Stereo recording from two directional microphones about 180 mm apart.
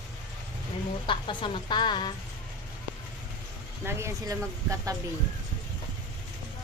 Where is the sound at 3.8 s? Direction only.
15° right (ahead or behind).